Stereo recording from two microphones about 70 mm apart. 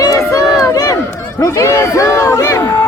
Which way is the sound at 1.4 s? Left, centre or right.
Left.